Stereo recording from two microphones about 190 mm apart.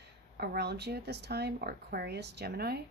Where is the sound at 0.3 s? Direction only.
60° right (ahead or behind).